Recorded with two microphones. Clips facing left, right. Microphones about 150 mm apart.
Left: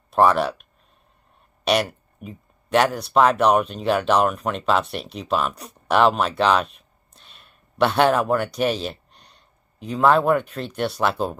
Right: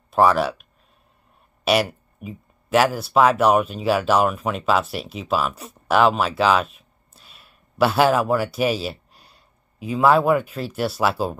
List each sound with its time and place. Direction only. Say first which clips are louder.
0.1 s speech: even; centre (ahead or behind)